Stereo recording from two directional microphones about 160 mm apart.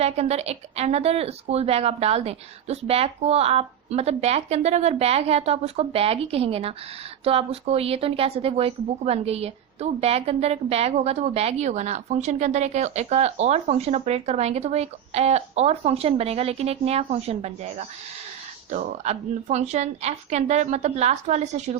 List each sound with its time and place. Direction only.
0.0 s speech: 40° right (ahead or behind)